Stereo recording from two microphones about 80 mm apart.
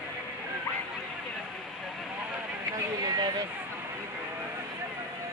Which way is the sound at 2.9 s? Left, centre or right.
Right.